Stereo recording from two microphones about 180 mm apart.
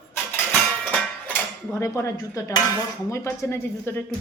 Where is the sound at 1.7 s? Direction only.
15° left (ahead or behind).